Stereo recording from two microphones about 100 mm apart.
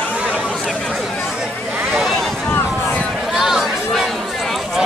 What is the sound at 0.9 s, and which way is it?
Speech, centre (ahead or behind).